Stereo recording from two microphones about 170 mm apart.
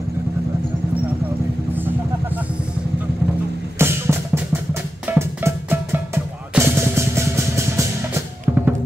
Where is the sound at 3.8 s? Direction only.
15° right (ahead or behind).